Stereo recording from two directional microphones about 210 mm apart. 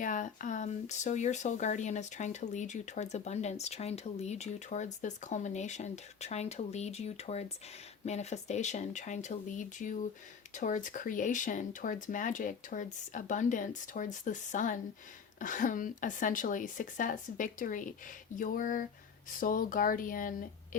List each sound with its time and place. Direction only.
0.0 s speech: 40° left (ahead or behind)